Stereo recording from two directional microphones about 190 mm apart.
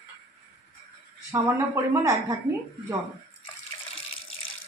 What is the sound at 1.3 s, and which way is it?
Speech, 15° right (ahead or behind).